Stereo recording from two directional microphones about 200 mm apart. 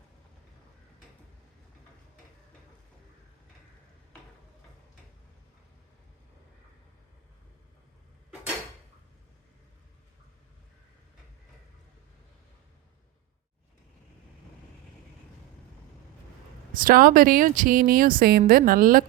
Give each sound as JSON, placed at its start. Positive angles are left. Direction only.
{"t": 16.7, "sound": "speech", "side_deg": -45}